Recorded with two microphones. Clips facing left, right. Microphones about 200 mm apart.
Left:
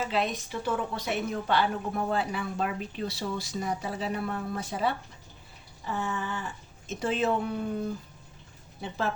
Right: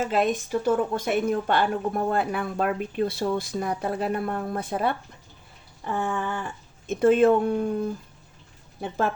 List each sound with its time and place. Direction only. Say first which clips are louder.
0.0 s a woman's voice: right 6 dB; 50° right (ahead or behind)
5.8 s a sound: right 5 dB; 55° right (ahead or behind)
6.8 s a woman's voice: right 10 dB; 55° right (ahead or behind)